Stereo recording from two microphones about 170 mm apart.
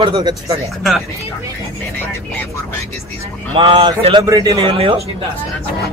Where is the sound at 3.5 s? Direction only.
30° right (ahead or behind).